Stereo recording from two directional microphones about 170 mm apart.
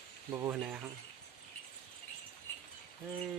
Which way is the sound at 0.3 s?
20° right (ahead or behind).